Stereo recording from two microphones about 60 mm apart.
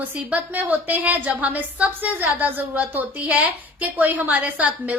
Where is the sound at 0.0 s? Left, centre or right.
Right.